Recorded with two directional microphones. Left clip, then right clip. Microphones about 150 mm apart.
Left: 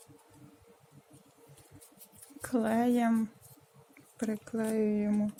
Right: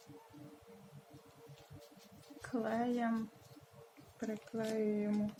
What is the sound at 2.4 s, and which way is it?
Speech, 70° left (ahead or behind).